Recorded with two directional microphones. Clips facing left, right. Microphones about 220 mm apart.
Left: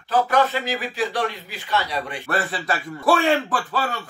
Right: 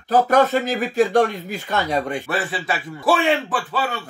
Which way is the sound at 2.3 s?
Centre (ahead or behind).